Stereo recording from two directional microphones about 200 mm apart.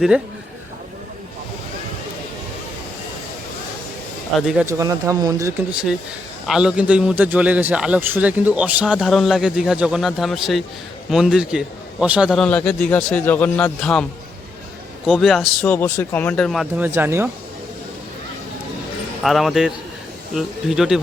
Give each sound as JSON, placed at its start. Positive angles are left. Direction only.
{"t": 4.4, "sound": "a man's voice", "side_deg": -5}
{"t": 4.6, "sound": "speech", "side_deg": -15}
{"t": 6.5, "sound": "a man's voice", "side_deg": -5}
{"t": 15.0, "sound": "a man's voice", "side_deg": 0}
{"t": 19.2, "sound": "a man's voice", "side_deg": 0}